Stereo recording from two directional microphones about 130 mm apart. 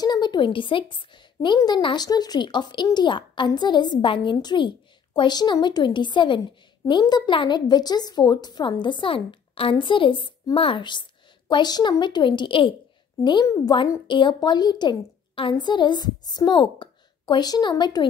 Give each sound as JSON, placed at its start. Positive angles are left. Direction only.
{"t": 0.0, "sound": "a woman's voice", "side_deg": 30}
{"t": 14.0, "sound": "a woman's voice", "side_deg": 40}